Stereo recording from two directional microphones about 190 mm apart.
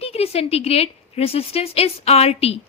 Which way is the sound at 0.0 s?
30° left (ahead or behind).